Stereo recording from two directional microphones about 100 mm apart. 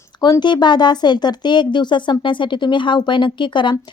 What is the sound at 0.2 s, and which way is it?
A woman's voice, 45° left (ahead or behind).